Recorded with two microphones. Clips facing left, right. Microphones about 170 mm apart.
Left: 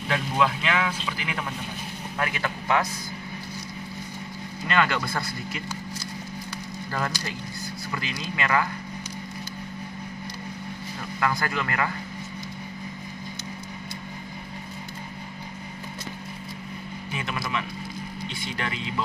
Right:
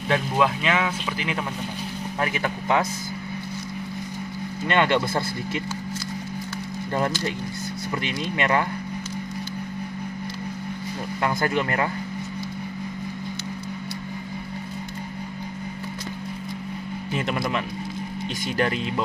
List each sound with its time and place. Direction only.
0.1 s a man's voice: 20° right (ahead or behind)
4.6 s a man's voice: 25° right (ahead or behind)
7.9 s a man's voice: 25° right (ahead or behind)
11.1 s a man's voice: 25° right (ahead or behind)
17.1 s speech: 40° right (ahead or behind)